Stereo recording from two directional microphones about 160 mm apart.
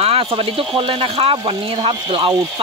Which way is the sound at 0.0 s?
35° right (ahead or behind).